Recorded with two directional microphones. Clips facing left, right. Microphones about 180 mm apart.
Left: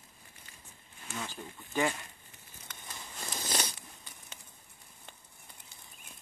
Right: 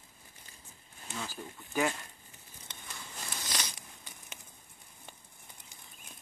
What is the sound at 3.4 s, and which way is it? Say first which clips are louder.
Biting: left 5 dB; 30° left (ahead or behind).